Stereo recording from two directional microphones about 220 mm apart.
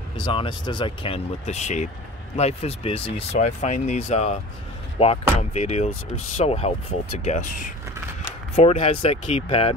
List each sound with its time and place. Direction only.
0.2 s speech: 20° left (ahead or behind)